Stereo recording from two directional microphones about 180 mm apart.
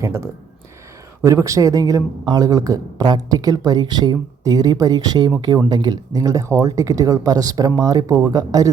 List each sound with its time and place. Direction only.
0.0 s speech: 15° right (ahead or behind)